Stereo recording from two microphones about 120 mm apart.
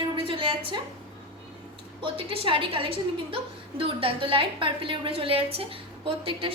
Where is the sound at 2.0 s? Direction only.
45° right (ahead or behind).